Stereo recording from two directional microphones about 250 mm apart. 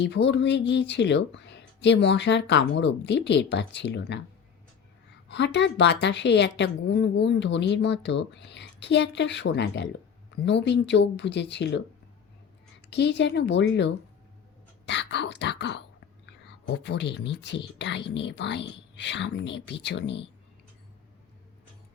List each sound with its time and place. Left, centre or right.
0.0 s a woman's voice: left
5.3 s a woman's voice: left
12.9 s a woman's voice: left